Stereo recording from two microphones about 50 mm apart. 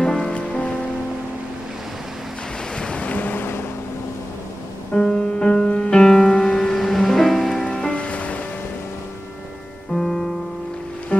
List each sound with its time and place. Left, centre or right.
0.0 s music: centre
2.8 s waves: left
4.9 s music: centre
7.9 s music: left
9.9 s music: centre